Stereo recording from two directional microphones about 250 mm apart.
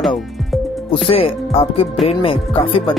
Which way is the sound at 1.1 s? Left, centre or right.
Left.